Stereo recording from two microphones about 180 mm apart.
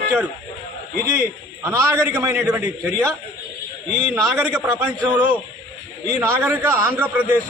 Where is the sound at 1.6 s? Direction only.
15° right (ahead or behind).